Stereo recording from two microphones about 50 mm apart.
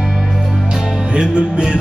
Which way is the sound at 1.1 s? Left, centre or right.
Centre.